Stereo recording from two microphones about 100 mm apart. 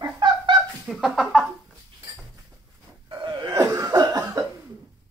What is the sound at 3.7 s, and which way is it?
Cough, 35° right (ahead or behind).